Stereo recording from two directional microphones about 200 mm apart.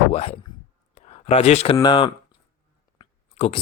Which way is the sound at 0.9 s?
30° left (ahead or behind).